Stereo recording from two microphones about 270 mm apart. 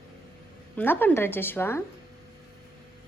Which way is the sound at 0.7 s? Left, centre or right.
Centre.